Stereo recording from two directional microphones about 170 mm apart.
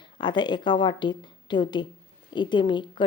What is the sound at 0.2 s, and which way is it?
A woman's voice, 25° left (ahead or behind).